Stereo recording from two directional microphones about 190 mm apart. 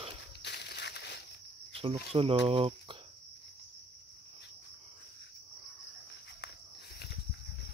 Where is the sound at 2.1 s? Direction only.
30° right (ahead or behind).